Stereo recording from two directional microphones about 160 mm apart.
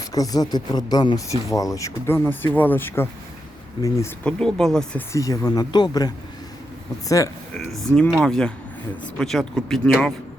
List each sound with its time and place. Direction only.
0.1 s speech: 25° left (ahead or behind)
4.2 s speech: 5° left (ahead or behind)
5.1 s speech: 20° left (ahead or behind)
7.9 s speech: 5° left (ahead or behind)